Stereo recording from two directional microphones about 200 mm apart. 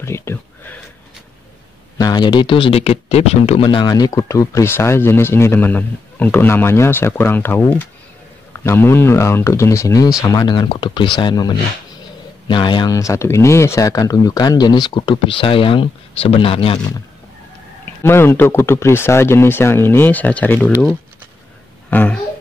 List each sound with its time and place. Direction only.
0.0 s speech: 15° left (ahead or behind)
2.0 s speech: 20° left (ahead or behind)
18.0 s speech: 10° left (ahead or behind)
21.9 s speech: 10° left (ahead or behind)